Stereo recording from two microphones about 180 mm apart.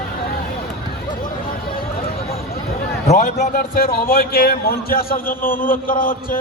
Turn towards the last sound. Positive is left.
turn(degrees=50)  # may be behind; listen again after turning